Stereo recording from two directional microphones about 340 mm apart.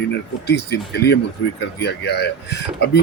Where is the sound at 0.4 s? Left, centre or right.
Left.